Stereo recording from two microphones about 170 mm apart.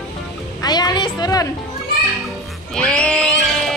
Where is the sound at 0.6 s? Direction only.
25° left (ahead or behind).